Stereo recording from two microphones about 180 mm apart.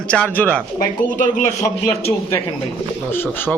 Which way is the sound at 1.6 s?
15° left (ahead or behind).